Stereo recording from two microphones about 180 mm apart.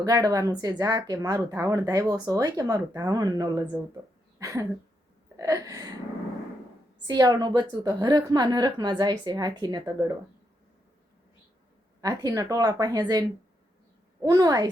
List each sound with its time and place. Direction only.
0.0 s speech: 20° right (ahead or behind)
4.4 s a sound: 20° right (ahead or behind)
5.4 s speech: 15° right (ahead or behind)
7.1 s speech: 20° right (ahead or behind)
12.0 s speech: 20° right (ahead or behind)